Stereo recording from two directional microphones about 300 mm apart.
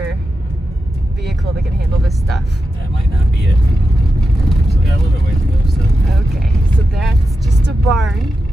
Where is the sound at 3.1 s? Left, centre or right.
Left.